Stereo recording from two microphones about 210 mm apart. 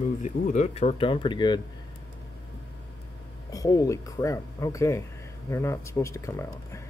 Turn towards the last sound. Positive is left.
turn(degrees=15)  # may be behind; listen again after turning